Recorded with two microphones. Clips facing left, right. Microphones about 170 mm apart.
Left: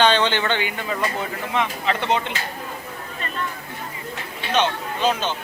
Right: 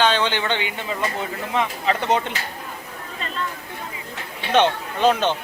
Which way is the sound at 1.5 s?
40° right (ahead or behind).